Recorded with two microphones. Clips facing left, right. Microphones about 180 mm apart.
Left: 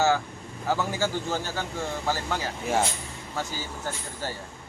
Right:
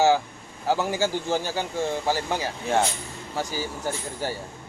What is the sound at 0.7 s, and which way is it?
Speech, 15° right (ahead or behind).